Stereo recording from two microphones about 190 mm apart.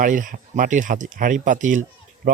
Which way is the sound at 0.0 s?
45° right (ahead or behind).